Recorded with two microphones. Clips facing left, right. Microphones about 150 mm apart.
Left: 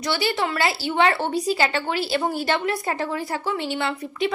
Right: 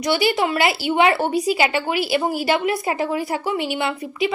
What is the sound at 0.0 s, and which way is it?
A woman's voice, 15° right (ahead or behind).